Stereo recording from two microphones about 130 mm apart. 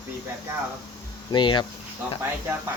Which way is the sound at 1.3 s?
35° left (ahead or behind).